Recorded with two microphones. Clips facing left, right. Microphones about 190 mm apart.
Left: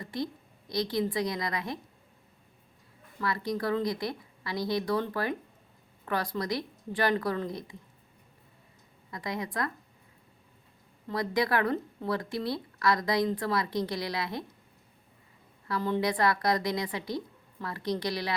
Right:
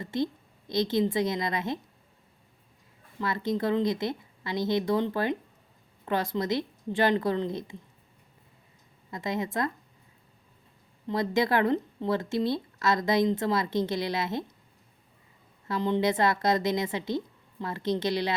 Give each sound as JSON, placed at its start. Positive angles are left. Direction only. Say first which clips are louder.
{"t": 0.0, "sound": "a woman's voice", "louder": "right 5 dB", "side_deg": -25}
{"t": 3.2, "sound": "speech", "louder": "right 3 dB", "side_deg": -25}
{"t": 9.0, "sound": "speech", "louder": "right 4 dB", "side_deg": -25}
{"t": 11.1, "sound": "speech", "louder": "right 3 dB", "side_deg": -25}
{"t": 15.6, "sound": "speech", "louder": "right 3 dB", "side_deg": -20}